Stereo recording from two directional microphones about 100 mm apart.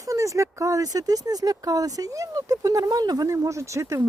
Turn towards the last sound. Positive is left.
turn(degrees=-30)  # may be behind; listen again after turning